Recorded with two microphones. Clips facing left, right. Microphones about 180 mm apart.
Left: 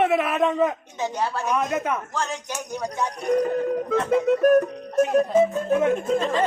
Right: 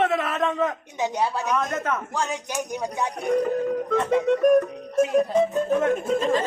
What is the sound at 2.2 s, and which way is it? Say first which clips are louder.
Speech: right 2 dB; 15° right (ahead or behind).